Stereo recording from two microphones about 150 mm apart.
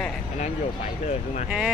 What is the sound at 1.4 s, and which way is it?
Speech, 5° right (ahead or behind).